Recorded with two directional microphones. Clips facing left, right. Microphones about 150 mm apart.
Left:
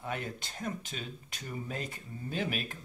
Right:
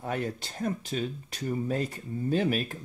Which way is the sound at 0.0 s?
40° right (ahead or behind).